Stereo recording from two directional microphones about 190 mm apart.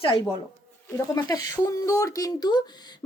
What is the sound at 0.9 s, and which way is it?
Speech, 20° left (ahead or behind).